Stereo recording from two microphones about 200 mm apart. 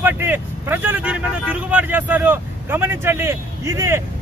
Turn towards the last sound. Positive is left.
turn(degrees=-15)  # may be behind; listen again after turning